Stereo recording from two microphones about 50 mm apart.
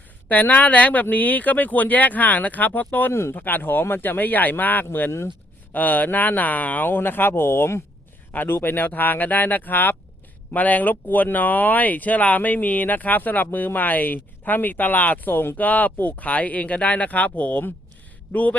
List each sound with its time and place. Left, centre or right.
0.3 s speech: left
3.1 s speech: left
3.3 s speech: left
8.3 s speech: left
15.5 s speech: left